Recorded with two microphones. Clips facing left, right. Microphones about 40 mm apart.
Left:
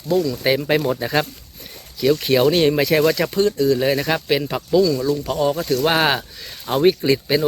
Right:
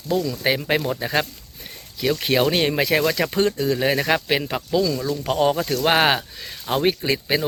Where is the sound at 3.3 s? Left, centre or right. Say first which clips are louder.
Left 2 dB; right.